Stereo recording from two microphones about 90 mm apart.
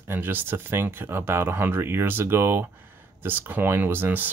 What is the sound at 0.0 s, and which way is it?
Speech, 25° right (ahead or behind).